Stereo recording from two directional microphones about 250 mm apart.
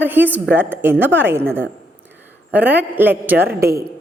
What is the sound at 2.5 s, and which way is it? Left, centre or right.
Speech, centre.